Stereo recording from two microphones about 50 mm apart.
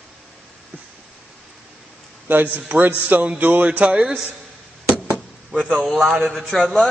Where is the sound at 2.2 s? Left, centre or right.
Right.